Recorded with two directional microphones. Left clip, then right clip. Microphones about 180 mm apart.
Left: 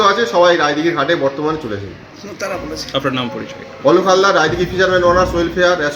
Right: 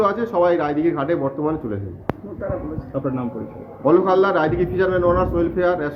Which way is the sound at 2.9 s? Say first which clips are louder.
Left 7 dB; 25° left (ahead or behind).